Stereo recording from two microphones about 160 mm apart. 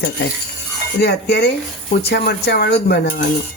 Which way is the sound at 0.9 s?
90° left.